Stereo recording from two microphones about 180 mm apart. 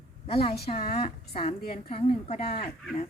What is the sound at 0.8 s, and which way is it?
A woman's voice, 50° left (ahead or behind).